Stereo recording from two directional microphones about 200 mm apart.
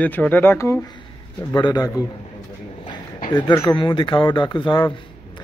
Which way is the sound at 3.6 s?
25° left (ahead or behind).